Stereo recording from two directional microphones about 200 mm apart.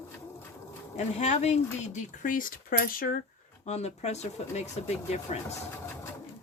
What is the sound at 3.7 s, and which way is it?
Speech, 35° left (ahead or behind).